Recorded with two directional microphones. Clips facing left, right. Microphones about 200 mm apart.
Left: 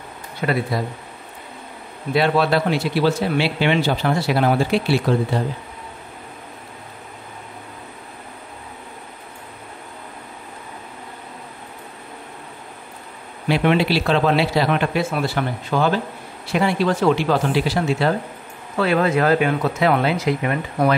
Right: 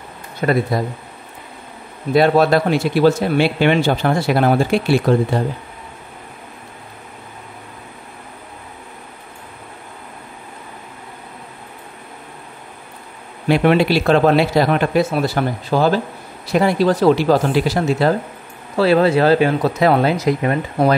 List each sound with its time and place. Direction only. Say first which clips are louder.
0.4 s speech: right 4 dB; 40° right (ahead or behind)
2.1 s speech: right 5 dB; 45° right (ahead or behind)
13.5 s speech: right 4 dB; 50° right (ahead or behind)